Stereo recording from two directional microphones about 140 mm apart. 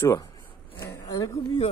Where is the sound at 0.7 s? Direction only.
25° left (ahead or behind).